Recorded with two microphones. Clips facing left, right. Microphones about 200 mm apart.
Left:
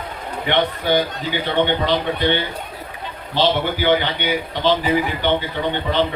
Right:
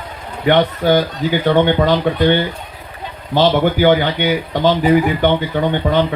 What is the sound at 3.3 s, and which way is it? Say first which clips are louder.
Speech: right 6 dB; 45° right (ahead or behind).